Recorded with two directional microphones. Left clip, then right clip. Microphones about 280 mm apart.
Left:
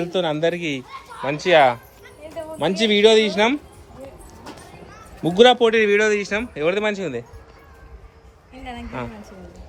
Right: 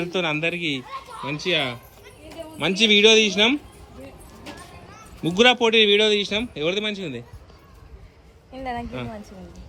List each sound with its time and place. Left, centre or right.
0.0 s a man's voice: centre
0.6 s speech: left
1.2 s a man's voice: centre
5.4 s a man's voice: centre